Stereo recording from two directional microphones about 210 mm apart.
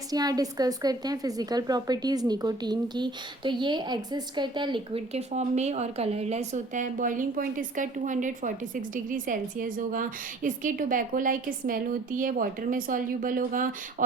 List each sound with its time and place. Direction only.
0.1 s a woman's voice: 20° right (ahead or behind); by 13.7 s 40° right (ahead or behind)